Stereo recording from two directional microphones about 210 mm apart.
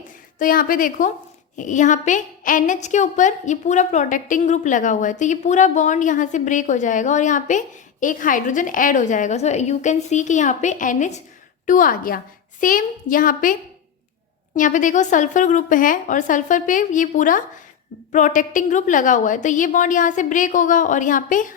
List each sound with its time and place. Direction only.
0.3 s a woman's voice: 40° left (ahead or behind)